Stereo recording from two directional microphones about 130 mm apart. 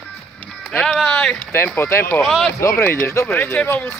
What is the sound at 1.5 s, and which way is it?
Speech, 20° left (ahead or behind).